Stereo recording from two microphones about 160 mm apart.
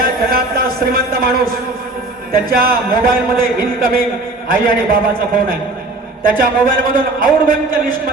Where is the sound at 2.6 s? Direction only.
65° right (ahead or behind).